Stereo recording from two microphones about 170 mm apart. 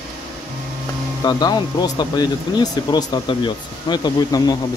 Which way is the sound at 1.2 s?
25° left (ahead or behind).